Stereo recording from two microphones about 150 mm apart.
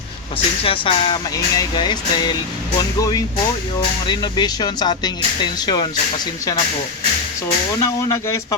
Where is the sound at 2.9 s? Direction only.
25° left (ahead or behind).